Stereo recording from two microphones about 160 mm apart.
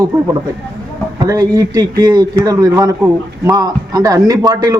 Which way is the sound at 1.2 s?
20° right (ahead or behind).